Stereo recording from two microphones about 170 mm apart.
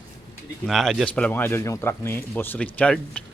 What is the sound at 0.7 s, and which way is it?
Speech, centre (ahead or behind).